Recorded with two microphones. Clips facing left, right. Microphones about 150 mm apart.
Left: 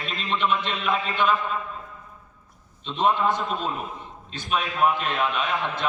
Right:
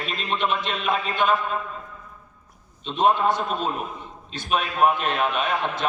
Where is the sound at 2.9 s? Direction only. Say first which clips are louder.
Right 2 dB; 50° right (ahead or behind).